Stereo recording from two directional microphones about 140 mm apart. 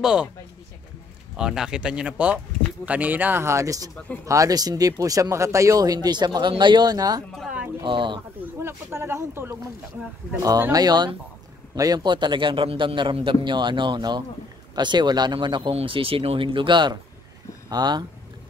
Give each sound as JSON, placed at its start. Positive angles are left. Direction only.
{"t": 0.0, "sound": "speech", "side_deg": -5}
{"t": 1.3, "sound": "speech", "side_deg": -5}
{"t": 7.3, "sound": "a sound", "side_deg": -10}
{"t": 7.8, "sound": "a man's voice", "side_deg": -35}
{"t": 8.5, "sound": "a man's voice", "side_deg": -20}